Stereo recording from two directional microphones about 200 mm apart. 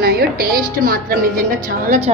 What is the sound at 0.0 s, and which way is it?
Speech, 50° right (ahead or behind).